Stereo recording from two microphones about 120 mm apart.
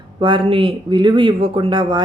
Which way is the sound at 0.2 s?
45° right (ahead or behind).